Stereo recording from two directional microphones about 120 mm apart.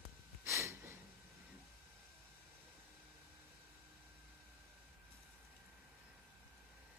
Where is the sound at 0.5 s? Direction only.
25° right (ahead or behind).